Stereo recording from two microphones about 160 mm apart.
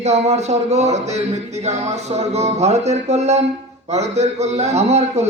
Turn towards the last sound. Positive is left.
turn(degrees=-45)  # may be behind; listen again after turning